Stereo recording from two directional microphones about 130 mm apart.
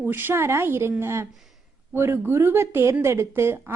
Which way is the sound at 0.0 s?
15° right (ahead or behind).